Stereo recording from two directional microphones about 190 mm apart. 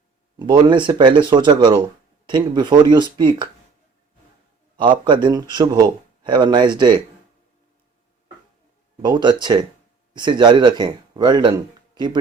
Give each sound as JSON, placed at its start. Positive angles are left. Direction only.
{"t": 0.3, "sound": "speech", "side_deg": -25}
{"t": 4.8, "sound": "speech", "side_deg": -25}
{"t": 9.0, "sound": "speech", "side_deg": -25}